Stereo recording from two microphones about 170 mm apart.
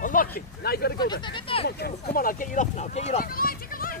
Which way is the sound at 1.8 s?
60° left (ahead or behind).